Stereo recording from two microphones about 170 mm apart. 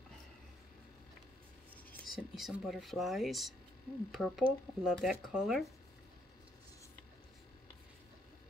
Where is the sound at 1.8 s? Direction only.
Centre (ahead or behind).